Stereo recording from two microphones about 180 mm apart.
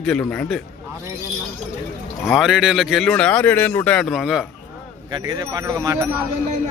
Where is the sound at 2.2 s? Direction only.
Centre (ahead or behind).